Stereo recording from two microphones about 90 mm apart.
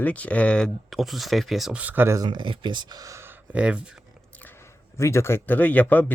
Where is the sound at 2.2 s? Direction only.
60° right (ahead or behind).